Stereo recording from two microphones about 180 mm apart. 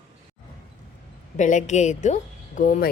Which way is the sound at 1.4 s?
45° left (ahead or behind).